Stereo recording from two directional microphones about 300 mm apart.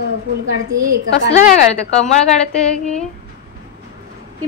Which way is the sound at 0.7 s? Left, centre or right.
Right.